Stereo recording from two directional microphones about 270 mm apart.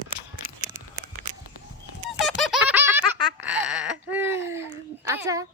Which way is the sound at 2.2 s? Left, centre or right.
Centre.